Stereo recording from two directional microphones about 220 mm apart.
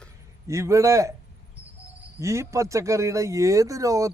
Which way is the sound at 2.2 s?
15° right (ahead or behind).